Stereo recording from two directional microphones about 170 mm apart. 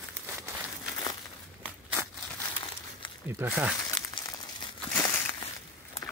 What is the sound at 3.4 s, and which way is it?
Speech, 15° right (ahead or behind).